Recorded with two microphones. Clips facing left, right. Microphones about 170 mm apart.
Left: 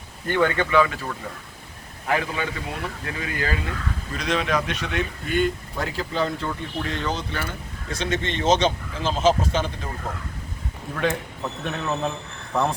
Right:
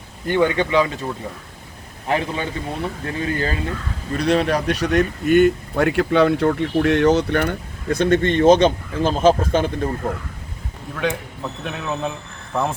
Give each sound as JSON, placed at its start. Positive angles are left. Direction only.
{"t": 0.3, "sound": "speech", "side_deg": -15}
{"t": 10.9, "sound": "a man's voice", "side_deg": 0}